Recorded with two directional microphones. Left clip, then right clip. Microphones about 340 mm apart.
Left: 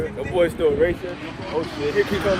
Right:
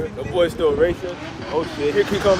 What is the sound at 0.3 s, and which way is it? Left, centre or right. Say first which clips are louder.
Speech: right 1 dB; centre.